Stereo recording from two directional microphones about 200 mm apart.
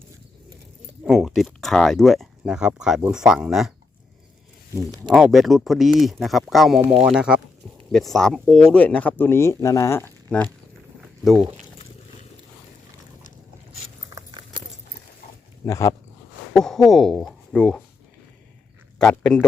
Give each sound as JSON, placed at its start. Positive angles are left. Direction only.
{"t": 1.0, "sound": "speech", "side_deg": 0}
{"t": 4.7, "sound": "speech", "side_deg": -20}
{"t": 5.1, "sound": "speech", "side_deg": 0}
{"t": 14.2, "sound": "keys jangling", "side_deg": -25}
{"t": 15.6, "sound": "speech", "side_deg": 15}
{"t": 16.6, "sound": "speech", "side_deg": 0}
{"t": 18.9, "sound": "speech", "side_deg": 5}